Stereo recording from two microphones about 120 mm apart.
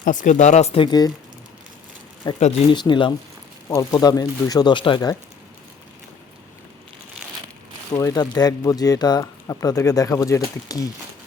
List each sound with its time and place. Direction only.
0.0 s speech: 90° left; by 0.8 s 70° left (ahead or behind)
0.8 s speech: 35° left (ahead or behind)
2.3 s speech: 35° left (ahead or behind)
3.8 s speech: 30° left (ahead or behind)
7.9 s speech: 30° left (ahead or behind)